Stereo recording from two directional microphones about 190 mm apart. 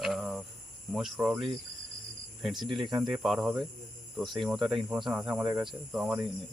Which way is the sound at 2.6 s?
Centre (ahead or behind).